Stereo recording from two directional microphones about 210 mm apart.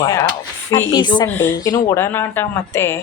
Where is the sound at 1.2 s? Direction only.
10° left (ahead or behind).